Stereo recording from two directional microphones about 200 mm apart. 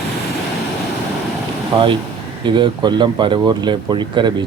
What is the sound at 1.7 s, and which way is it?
Speech, 20° right (ahead or behind).